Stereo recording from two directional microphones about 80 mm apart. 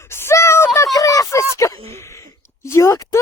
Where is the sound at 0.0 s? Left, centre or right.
Left.